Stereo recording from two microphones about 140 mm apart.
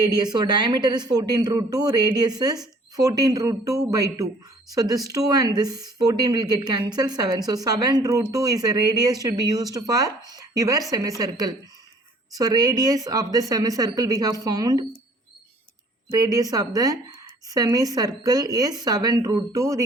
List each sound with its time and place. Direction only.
0.2 s speech: 30° right (ahead or behind)
16.1 s speech: 25° right (ahead or behind)